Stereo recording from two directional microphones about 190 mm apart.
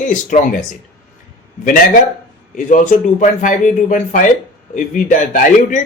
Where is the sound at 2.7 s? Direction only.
40° left (ahead or behind).